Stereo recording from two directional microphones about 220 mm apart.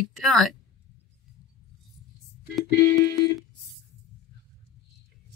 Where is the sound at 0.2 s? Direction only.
Centre (ahead or behind).